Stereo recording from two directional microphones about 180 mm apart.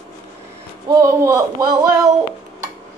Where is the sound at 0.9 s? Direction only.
15° right (ahead or behind).